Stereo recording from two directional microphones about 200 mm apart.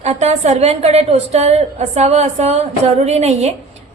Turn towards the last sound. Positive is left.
turn(degrees=-35)  # may be behind; listen again after turning